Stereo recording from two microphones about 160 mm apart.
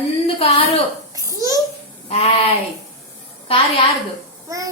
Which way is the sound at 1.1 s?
20° right (ahead or behind).